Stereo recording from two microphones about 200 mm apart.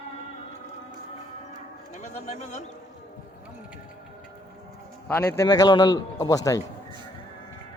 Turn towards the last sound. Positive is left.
turn(degrees=15)  # may be behind; listen again after turning